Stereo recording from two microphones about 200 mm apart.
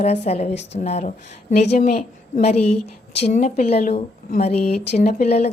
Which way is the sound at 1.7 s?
45° left (ahead or behind).